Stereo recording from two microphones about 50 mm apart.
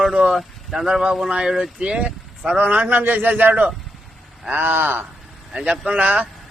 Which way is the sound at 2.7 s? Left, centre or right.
Right.